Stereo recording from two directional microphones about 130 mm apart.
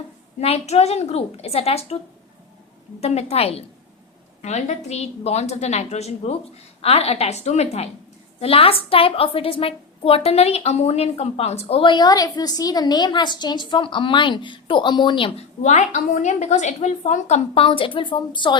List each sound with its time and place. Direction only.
0.3 s a woman's voice: 55° left (ahead or behind)
3.0 s a woman's voice: 55° left (ahead or behind)
15.6 s a woman's voice: 65° left (ahead or behind); by 18.5 s 35° left (ahead or behind)